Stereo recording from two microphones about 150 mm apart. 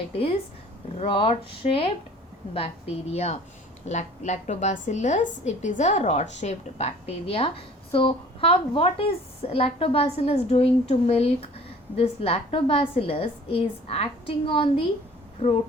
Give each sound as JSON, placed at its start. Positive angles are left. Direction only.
{"t": 0.1, "sound": "a woman's voice", "side_deg": 40}